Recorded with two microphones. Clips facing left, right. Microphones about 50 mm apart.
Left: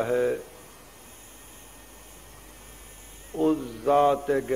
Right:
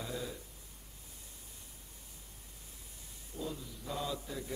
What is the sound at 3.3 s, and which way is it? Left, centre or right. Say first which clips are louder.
A man's voice: left 18 dB; left.